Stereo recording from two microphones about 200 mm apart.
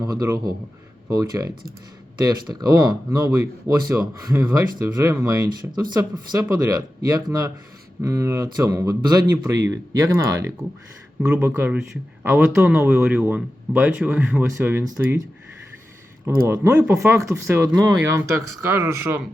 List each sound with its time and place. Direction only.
0.0 s speech: 15° right (ahead or behind)
8.0 s speech: 15° right (ahead or behind)
16.2 s speech: 10° right (ahead or behind)